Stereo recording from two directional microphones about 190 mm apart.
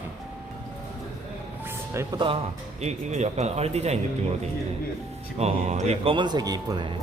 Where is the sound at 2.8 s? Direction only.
35° right (ahead or behind).